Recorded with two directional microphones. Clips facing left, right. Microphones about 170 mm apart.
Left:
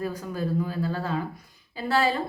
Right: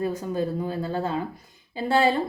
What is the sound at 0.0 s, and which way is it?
Speech, 25° right (ahead or behind).